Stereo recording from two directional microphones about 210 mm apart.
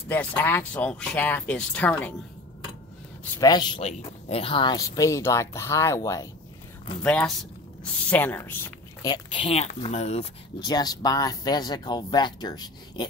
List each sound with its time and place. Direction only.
0.1 s speech: 10° left (ahead or behind)
3.3 s speech: 20° left (ahead or behind)
9.0 s speech: 20° left (ahead or behind)
10.6 s speech: 20° left (ahead or behind)